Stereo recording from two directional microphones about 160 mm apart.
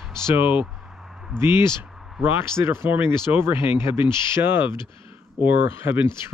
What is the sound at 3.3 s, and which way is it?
Speech, 15° right (ahead or behind).